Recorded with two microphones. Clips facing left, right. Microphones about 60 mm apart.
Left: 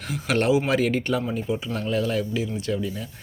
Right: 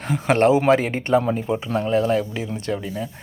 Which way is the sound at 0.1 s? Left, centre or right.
Right.